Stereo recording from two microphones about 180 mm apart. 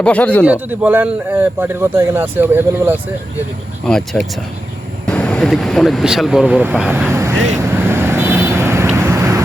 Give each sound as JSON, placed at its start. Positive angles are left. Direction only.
{"t": 0.0, "sound": "speech", "side_deg": 5}
{"t": 0.4, "sound": "speech", "side_deg": -10}
{"t": 3.8, "sound": "speech", "side_deg": 5}
{"t": 7.1, "sound": "vehicle", "side_deg": -15}